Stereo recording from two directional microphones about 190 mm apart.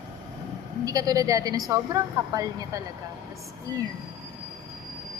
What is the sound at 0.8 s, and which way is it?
A woman's voice, 20° right (ahead or behind).